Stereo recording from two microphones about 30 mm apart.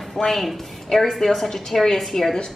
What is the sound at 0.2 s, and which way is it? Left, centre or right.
Speech, centre.